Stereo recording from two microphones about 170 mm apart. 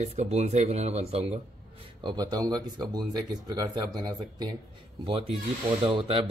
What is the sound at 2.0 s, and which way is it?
Speech, 25° right (ahead or behind).